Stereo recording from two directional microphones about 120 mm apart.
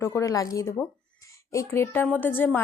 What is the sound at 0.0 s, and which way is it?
Speech, 25° left (ahead or behind).